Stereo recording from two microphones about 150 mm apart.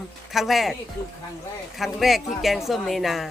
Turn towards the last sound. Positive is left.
turn(degrees=0)  # may be behind; listen again after turning